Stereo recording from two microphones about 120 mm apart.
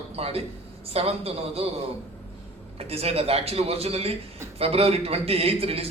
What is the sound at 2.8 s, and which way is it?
A man's voice, 55° right (ahead or behind).